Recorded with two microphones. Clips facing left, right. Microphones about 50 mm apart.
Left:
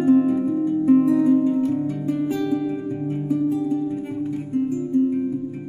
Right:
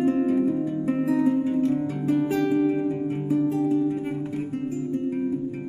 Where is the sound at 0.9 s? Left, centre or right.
Right.